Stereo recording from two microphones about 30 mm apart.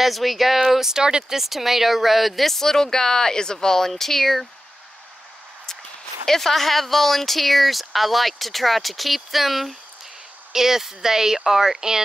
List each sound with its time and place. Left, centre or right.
0.0 s speech: centre
0.7 s speech: centre
1.3 s speech: centre
2.6 s speech: centre
6.2 s speech: centre
10.5 s speech: centre